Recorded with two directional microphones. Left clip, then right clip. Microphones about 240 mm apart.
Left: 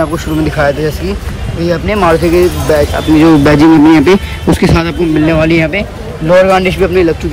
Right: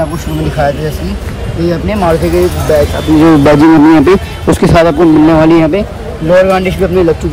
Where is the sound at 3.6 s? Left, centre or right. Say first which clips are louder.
Right 1 dB; left.